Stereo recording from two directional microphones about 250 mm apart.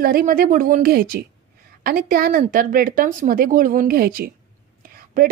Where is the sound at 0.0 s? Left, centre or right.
Right.